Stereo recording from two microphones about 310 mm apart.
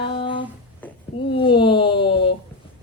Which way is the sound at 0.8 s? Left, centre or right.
Centre.